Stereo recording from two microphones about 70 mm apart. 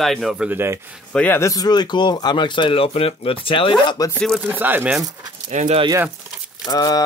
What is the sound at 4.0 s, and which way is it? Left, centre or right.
Speech, left.